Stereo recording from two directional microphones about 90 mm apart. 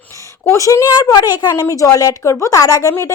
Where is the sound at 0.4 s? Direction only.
35° left (ahead or behind).